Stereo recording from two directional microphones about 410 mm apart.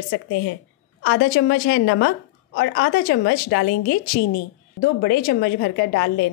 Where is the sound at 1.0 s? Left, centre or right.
Left.